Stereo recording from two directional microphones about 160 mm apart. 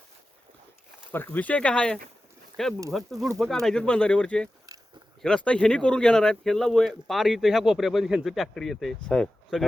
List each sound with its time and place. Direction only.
1.1 s speech: 15° left (ahead or behind)
4.7 s a sound: 20° right (ahead or behind)
5.2 s speech: 5° left (ahead or behind)